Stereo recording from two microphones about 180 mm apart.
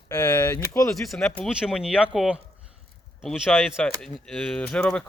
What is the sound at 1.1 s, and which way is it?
Speech, centre (ahead or behind).